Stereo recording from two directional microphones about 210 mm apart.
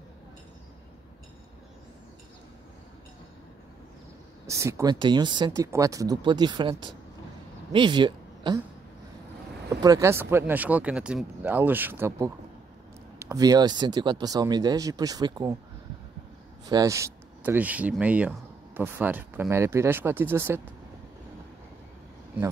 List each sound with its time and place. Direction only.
4.5 s speech: 15° right (ahead or behind)
9.8 s speech: 15° right (ahead or behind)
16.6 s speech: 15° right (ahead or behind)